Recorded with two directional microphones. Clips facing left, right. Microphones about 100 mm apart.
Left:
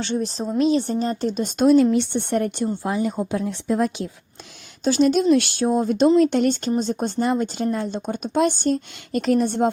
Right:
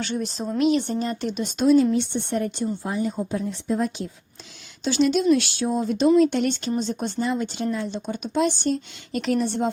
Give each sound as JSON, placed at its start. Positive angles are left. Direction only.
{"t": 0.0, "sound": "speech", "side_deg": 30}
{"t": 4.8, "sound": "speech", "side_deg": 45}